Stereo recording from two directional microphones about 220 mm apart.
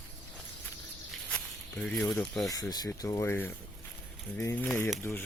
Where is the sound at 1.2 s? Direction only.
5° left (ahead or behind).